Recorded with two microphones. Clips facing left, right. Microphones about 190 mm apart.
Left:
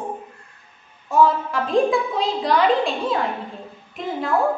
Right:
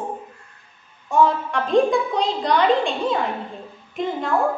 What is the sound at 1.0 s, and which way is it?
A woman's voice, centre (ahead or behind).